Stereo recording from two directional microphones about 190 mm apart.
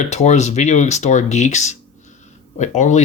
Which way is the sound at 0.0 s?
35° left (ahead or behind).